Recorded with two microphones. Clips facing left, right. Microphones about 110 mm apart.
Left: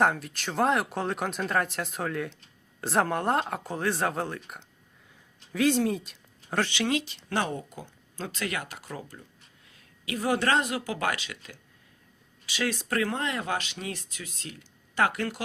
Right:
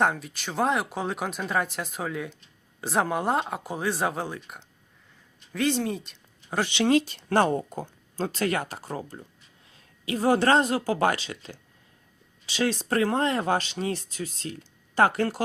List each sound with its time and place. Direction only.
0.0 s speech: centre (ahead or behind)
6.6 s speech: 20° right (ahead or behind)
6.8 s speech: 40° right (ahead or behind)